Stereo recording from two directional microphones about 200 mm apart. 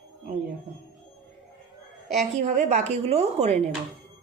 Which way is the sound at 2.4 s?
35° right (ahead or behind).